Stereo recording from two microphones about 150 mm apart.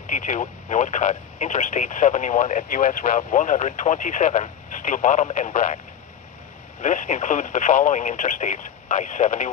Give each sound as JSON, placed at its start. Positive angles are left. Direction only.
{"t": 0.1, "sound": "speech", "side_deg": 55}
{"t": 6.8, "sound": "speech", "side_deg": 55}